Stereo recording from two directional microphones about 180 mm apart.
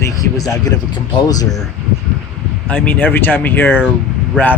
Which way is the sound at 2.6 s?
10° left (ahead or behind).